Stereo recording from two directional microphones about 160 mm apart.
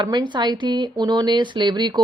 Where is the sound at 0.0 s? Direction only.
30° right (ahead or behind).